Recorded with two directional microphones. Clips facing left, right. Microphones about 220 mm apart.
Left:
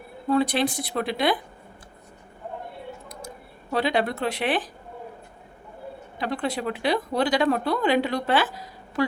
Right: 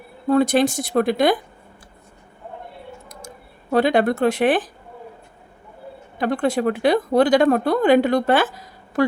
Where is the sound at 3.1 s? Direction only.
45° right (ahead or behind).